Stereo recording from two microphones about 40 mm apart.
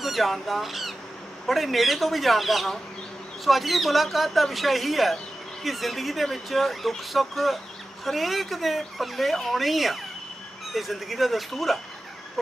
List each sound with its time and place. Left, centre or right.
0.0 s speech: centre